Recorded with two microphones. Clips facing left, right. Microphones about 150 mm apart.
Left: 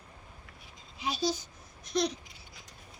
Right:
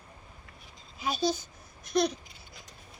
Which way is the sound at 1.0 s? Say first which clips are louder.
Right 2 dB; 50° right (ahead or behind).